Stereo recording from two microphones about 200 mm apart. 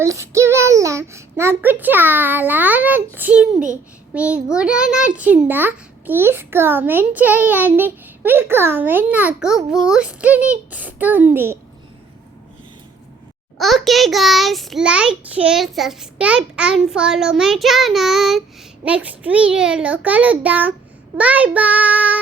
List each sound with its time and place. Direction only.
0.0 s a child's voice: 15° right (ahead or behind)
3.5 s a child's voice: 40° right (ahead or behind)
4.1 s a child's voice: 5° right (ahead or behind)
13.6 s a child's voice: centre (ahead or behind)